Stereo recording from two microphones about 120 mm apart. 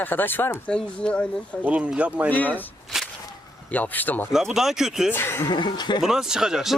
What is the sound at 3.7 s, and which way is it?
Speech, 15° left (ahead or behind).